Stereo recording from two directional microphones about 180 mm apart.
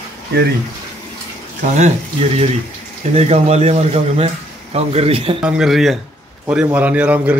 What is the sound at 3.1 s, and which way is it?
A man's voice, 35° right (ahead or behind).